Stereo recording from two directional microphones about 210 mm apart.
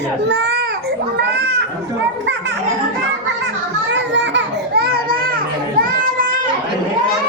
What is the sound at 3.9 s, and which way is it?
Children playing, 60° right (ahead or behind).